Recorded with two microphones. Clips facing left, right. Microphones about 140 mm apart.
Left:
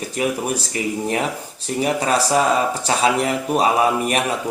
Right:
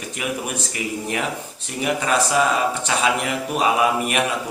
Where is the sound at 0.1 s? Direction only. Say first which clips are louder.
Left 5 dB; 35° left (ahead or behind).